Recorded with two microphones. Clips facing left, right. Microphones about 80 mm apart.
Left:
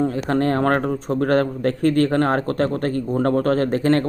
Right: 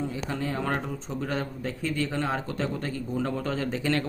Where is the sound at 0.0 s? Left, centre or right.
Left.